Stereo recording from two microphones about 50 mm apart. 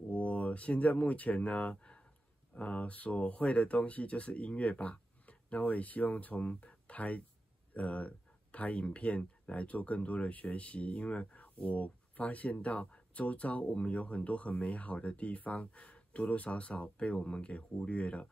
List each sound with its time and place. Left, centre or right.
0.1 s speech: left